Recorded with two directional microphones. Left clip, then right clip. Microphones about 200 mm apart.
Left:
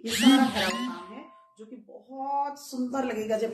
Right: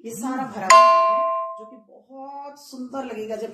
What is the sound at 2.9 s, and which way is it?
Speech, 20° left (ahead or behind).